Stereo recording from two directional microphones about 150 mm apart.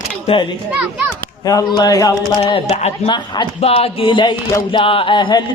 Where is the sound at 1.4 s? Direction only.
25° left (ahead or behind).